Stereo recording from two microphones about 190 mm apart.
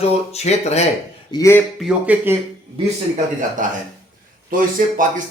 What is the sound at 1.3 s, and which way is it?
Speech, 15° left (ahead or behind).